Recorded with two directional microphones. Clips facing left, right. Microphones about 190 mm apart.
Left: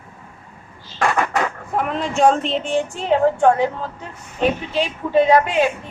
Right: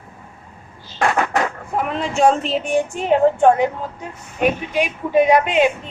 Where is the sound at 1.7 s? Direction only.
Centre (ahead or behind).